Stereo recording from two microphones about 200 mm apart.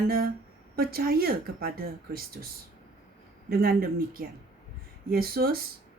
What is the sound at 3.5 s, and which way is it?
A woman's voice, 50° right (ahead or behind).